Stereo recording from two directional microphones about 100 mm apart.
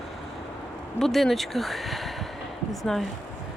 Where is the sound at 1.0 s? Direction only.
Centre (ahead or behind).